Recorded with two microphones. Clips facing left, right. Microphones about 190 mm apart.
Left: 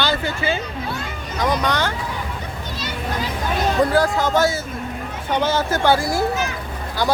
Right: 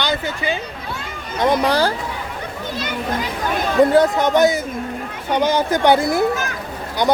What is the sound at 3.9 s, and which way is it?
Speech, 20° right (ahead or behind).